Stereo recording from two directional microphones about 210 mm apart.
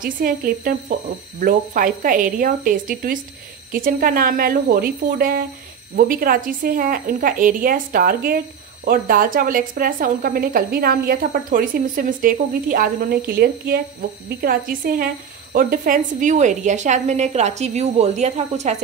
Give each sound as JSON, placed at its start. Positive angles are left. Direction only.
{"t": 0.0, "sound": "a woman's voice", "side_deg": -45}